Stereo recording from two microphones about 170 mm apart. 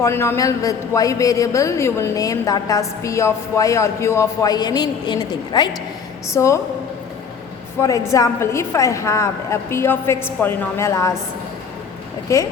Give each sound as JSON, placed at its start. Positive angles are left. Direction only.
{"t": 0.0, "sound": "a man's voice", "side_deg": 15}
{"t": 7.8, "sound": "a woman's voice", "side_deg": 20}
{"t": 12.3, "sound": "a woman's voice", "side_deg": 15}